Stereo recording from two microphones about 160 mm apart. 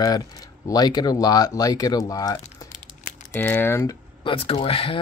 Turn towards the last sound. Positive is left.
turn(degrees=35)  # may be behind; listen again after turning